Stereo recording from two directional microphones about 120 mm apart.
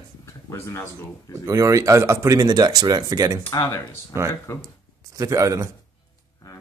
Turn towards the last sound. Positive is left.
turn(degrees=-25)  # may be behind; listen again after turning